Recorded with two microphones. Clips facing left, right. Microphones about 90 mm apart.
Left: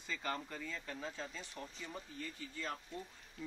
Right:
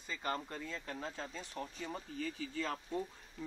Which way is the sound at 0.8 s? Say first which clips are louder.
Right 2 dB; 40° right (ahead or behind).